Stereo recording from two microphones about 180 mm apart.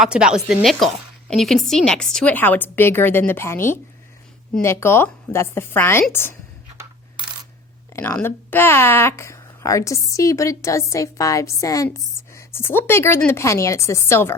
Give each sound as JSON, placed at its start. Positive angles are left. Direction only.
{"t": 0.0, "sound": "a woman's voice", "side_deg": -5}
{"t": 7.9, "sound": "speech", "side_deg": 10}